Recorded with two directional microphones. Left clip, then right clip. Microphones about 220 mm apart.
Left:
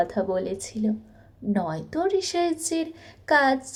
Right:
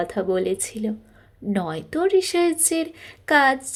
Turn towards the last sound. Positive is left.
turn(degrees=-35)  # may be behind; listen again after turning